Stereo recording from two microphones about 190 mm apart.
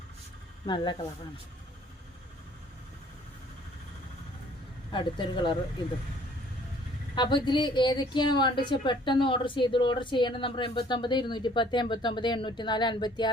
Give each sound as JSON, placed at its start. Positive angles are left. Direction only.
{"t": 0.6, "sound": "a woman's voice", "side_deg": 25}
{"t": 4.9, "sound": "a woman's voice", "side_deg": 25}
{"t": 7.2, "sound": "a woman's voice", "side_deg": 25}